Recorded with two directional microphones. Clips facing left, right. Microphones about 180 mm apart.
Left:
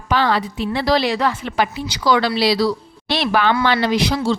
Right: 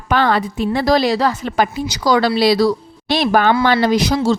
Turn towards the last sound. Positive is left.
turn(degrees=-40)  # may be behind; listen again after turning